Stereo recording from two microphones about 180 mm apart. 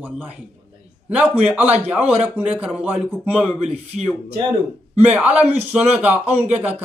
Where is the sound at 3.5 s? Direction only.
40° right (ahead or behind).